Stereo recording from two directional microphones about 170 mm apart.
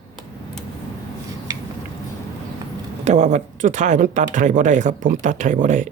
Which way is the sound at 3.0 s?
45° right (ahead or behind).